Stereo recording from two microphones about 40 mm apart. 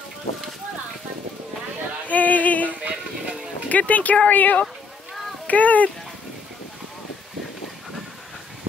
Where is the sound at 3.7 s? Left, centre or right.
Left.